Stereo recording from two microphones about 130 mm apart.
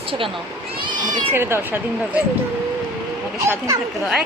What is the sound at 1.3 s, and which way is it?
Speech, 20° right (ahead or behind).